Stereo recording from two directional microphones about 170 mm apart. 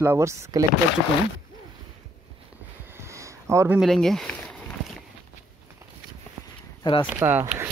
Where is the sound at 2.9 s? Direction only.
15° right (ahead or behind).